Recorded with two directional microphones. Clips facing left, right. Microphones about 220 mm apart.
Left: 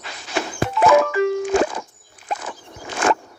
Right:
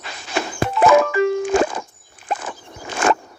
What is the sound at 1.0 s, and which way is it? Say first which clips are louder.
Music: right 1 dB; 45° right (ahead or behind).